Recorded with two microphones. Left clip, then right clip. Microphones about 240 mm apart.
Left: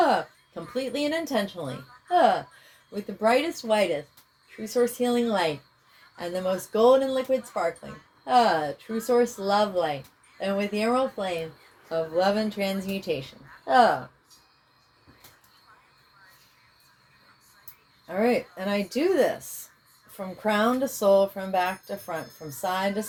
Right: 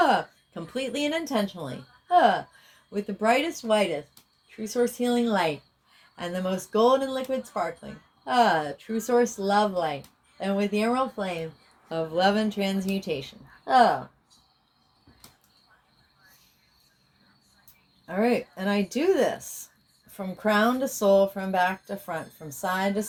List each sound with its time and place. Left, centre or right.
0.0 s speech: right
4.4 s speech: right
18.0 s speech: right